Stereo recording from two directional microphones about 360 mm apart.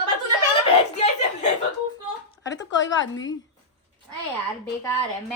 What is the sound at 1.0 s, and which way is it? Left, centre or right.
Chuckle, centre.